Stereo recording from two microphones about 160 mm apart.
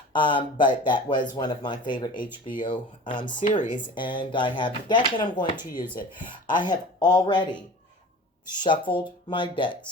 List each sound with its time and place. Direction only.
0.1 s speech: 30° left (ahead or behind)
8.9 s speech: 30° left (ahead or behind)